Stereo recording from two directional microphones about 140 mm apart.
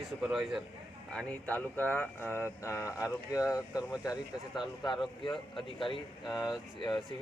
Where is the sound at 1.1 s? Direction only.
10° left (ahead or behind).